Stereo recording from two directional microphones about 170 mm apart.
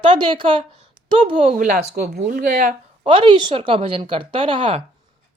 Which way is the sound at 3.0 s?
30° right (ahead or behind).